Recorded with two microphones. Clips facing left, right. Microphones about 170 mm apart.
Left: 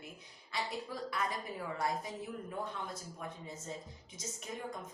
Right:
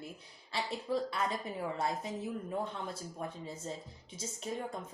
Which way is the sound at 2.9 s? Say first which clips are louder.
Right 4 dB; 30° right (ahead or behind).